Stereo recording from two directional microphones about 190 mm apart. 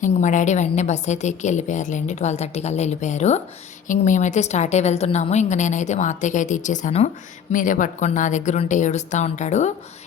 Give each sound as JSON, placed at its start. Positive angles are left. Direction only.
{"t": 0.0, "sound": "a woman's voice", "side_deg": 40}